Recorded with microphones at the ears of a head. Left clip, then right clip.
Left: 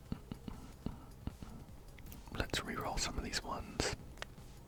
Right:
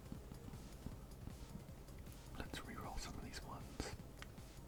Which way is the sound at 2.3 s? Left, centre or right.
Left.